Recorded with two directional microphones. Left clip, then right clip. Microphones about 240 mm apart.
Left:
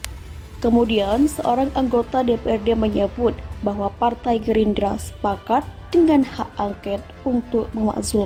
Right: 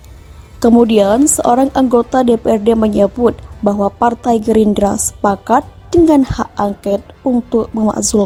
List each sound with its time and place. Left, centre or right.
0.6 s a woman's voice: right